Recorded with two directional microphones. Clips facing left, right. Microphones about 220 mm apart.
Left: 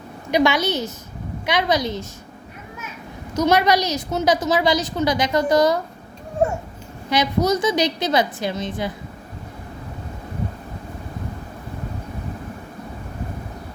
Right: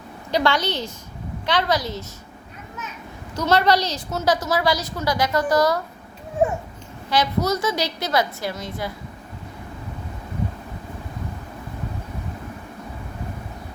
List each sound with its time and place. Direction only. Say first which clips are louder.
0.3 s a woman's voice: left 3 dB; 10° left (ahead or behind)
3.3 s a woman's voice: left 2 dB; 15° left (ahead or behind)
7.1 s a woman's voice: left 2 dB; 15° left (ahead or behind)